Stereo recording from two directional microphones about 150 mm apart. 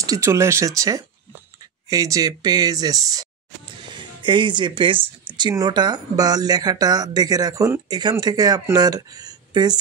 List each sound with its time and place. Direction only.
0.0 s speech: 20° right (ahead or behind)